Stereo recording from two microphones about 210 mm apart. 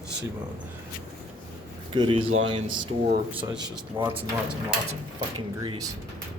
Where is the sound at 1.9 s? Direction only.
25° right (ahead or behind).